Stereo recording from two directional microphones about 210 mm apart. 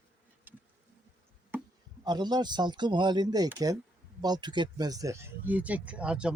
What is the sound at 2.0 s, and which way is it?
Speech, 20° right (ahead or behind).